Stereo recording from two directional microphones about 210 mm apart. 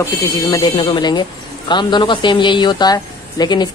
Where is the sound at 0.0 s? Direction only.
15° left (ahead or behind).